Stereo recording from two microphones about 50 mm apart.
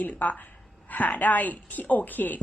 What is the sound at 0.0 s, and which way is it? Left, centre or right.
A woman's voice, left.